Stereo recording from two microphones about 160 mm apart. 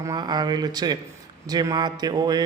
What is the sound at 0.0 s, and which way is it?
Speech, 25° right (ahead or behind).